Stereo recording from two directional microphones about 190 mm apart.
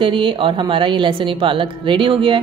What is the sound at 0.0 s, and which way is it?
A woman's voice, 25° right (ahead or behind).